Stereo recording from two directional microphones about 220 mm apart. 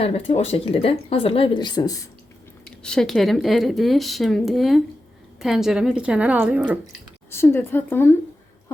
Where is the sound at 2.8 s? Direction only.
5° left (ahead or behind).